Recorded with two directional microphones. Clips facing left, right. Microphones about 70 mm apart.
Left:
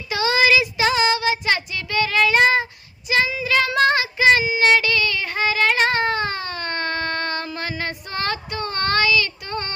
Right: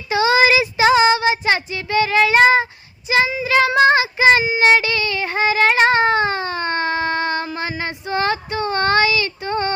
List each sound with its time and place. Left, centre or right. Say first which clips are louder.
0.1 s child singing: right 3 dB; right